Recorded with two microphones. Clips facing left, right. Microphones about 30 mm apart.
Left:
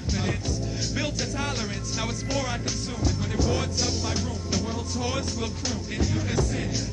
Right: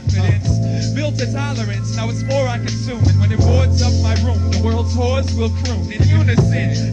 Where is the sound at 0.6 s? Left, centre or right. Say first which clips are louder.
Right 8 dB; centre.